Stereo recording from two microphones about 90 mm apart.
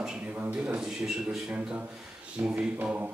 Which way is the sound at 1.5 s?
15° right (ahead or behind).